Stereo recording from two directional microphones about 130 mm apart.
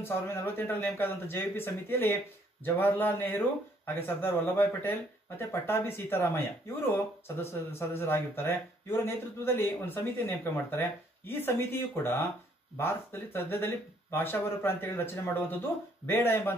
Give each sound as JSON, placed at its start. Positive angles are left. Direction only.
{"t": 0.0, "sound": "speech", "side_deg": 20}